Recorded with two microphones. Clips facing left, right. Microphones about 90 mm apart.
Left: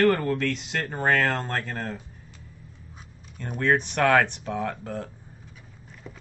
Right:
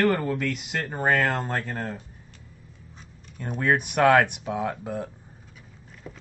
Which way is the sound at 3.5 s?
10° right (ahead or behind).